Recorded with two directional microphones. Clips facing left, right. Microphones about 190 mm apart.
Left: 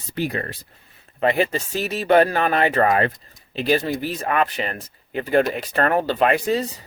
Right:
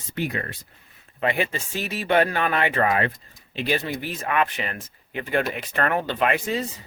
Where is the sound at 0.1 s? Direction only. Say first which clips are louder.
Left 3 dB; 35° left (ahead or behind).